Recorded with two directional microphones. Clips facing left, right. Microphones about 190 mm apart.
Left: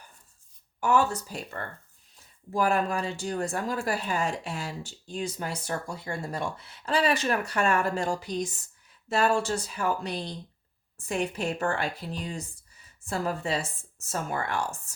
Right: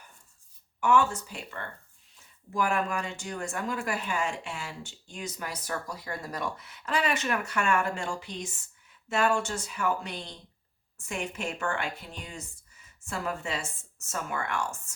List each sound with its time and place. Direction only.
0.8 s speech: 35° left (ahead or behind)